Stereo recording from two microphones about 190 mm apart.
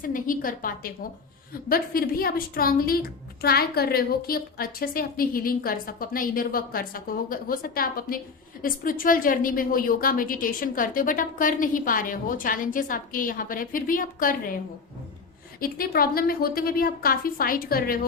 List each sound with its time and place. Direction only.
0.0 s a woman's voice: 45° left (ahead or behind)
15.6 s a woman's voice: 50° left (ahead or behind)